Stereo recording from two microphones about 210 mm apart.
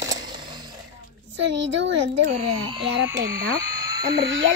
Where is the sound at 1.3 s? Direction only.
60° right (ahead or behind).